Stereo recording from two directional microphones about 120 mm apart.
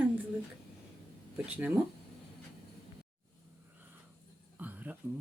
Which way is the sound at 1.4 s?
10° right (ahead or behind).